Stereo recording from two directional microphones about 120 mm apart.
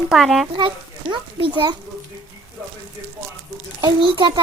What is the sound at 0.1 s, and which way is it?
Speech, centre (ahead or behind).